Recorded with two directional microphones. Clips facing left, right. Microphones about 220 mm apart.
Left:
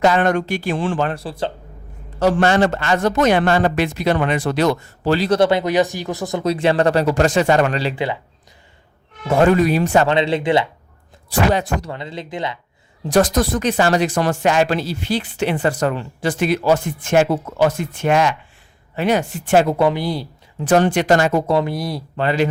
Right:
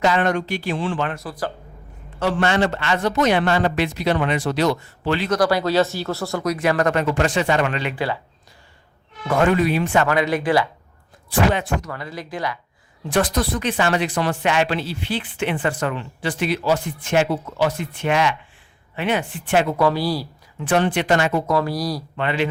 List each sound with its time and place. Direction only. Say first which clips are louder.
0.0 s speech: left 3 dB; 50° left (ahead or behind); by 1.5 s 25° left (ahead or behind)
2.1 s speech: left 4 dB; 40° left (ahead or behind)
5.4 s speech: left 2 dB; 20° left (ahead or behind)
7.9 s speech: left 2 dB; 20° left (ahead or behind)
9.2 s speech: left 4 dB; 30° left (ahead or behind)
10.1 s speech: left 2 dB; 25° left (ahead or behind)
11.3 s speech: left 2 dB; 40° left (ahead or behind)
11.9 s speech: left 2 dB; 25° left (ahead or behind)
13.1 s speech: left 5 dB; 40° left (ahead or behind)
19.8 s speech: left 1 dB; 20° left (ahead or behind)
20.6 s speech: left 4 dB; 40° left (ahead or behind)
21.5 s speech: left 2 dB; 25° left (ahead or behind)